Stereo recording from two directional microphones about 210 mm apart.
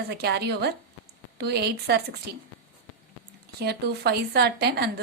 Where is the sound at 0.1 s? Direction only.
50° right (ahead or behind).